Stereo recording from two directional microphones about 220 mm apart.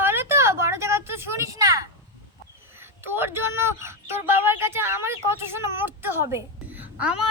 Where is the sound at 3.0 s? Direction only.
10° right (ahead or behind).